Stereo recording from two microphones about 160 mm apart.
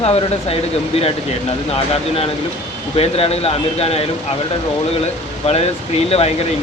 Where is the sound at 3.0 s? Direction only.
40° left (ahead or behind).